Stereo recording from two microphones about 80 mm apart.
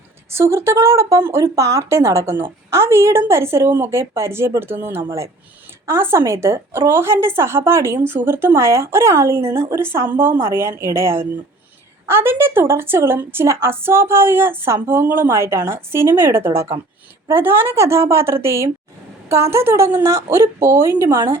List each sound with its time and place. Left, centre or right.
0.3 s a woman's voice: right